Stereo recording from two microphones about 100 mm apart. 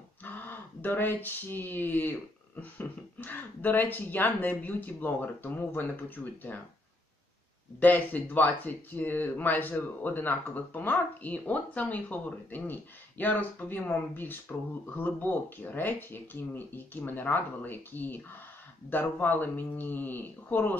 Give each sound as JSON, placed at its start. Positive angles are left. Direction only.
{"t": 0.2, "sound": "speech", "side_deg": 20}
{"t": 7.8, "sound": "speech", "side_deg": 15}